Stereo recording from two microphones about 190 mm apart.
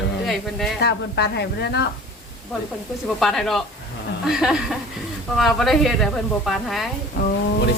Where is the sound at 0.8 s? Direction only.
65° left (ahead or behind).